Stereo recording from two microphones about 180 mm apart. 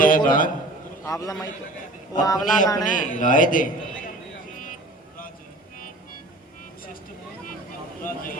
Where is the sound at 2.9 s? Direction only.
45° left (ahead or behind).